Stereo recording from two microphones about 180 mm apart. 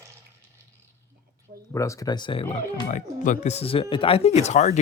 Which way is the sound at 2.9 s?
40° left (ahead or behind).